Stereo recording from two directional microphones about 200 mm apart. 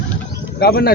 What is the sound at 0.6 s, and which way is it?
Speech, 50° left (ahead or behind).